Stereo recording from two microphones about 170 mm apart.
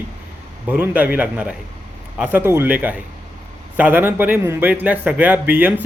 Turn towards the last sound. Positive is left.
turn(degrees=-10)  # may be behind; listen again after turning